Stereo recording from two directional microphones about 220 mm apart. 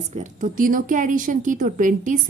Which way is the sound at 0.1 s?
35° right (ahead or behind).